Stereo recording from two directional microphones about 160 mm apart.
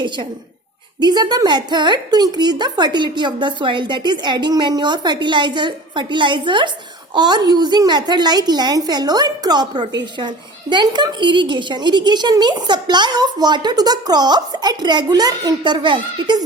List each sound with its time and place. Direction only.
0.9 s a woman's voice: 25° right (ahead or behind)